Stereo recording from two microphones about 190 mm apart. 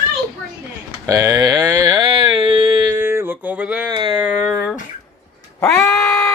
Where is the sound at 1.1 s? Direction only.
20° right (ahead or behind).